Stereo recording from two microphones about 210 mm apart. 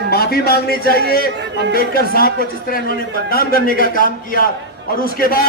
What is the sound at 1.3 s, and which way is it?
Speech, 55° right (ahead or behind).